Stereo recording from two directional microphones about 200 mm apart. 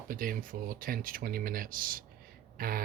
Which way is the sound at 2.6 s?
45° right (ahead or behind).